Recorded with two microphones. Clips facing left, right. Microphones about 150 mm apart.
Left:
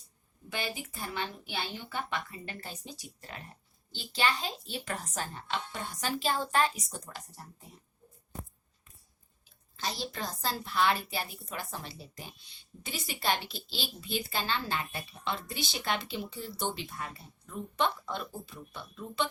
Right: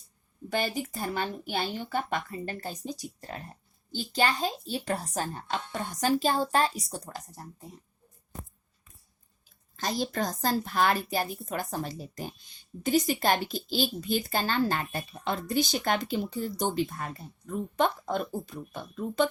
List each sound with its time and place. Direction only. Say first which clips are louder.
0.5 s a woman's voice: right 7 dB; 40° right (ahead or behind)
9.7 s a woman's voice: right 7 dB; 45° right (ahead or behind)